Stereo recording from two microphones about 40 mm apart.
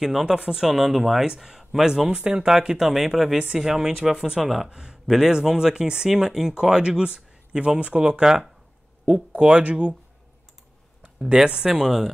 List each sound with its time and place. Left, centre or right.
0.0 s speech: centre
0.7 s speech: centre
4.6 s speech: centre
11.0 s speech: right